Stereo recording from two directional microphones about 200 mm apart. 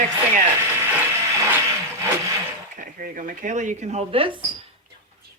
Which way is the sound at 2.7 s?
45° right (ahead or behind).